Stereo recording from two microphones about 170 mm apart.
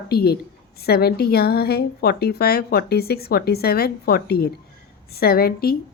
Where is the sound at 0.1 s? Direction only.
65° left (ahead or behind).